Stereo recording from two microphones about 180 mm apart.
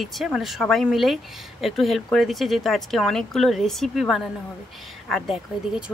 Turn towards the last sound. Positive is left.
turn(degrees=0)  # may be behind; listen again after turning